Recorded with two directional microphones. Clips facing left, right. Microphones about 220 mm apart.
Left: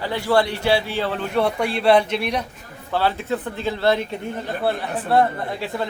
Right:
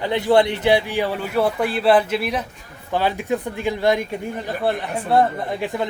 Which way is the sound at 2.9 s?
15° right (ahead or behind).